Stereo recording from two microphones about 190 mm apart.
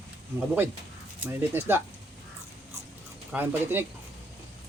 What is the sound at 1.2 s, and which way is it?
Speech, 10° right (ahead or behind).